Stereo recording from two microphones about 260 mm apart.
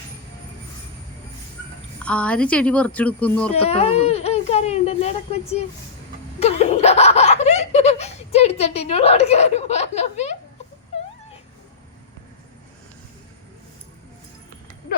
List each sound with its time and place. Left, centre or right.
2.0 s speech: centre
3.5 s speech: left
6.4 s laughter: left